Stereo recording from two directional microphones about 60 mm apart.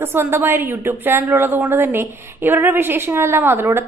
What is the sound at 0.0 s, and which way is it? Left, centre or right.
A woman's voice, right.